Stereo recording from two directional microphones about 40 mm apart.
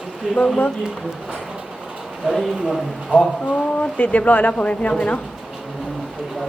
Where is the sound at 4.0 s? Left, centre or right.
Left.